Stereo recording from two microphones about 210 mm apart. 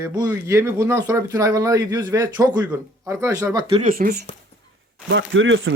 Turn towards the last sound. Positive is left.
turn(degrees=-65)  # may be behind; listen again after turning